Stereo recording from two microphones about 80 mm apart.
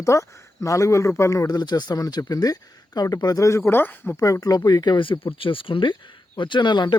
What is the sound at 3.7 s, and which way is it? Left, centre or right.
Speech, left.